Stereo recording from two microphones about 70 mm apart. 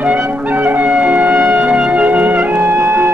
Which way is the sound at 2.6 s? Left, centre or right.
Right.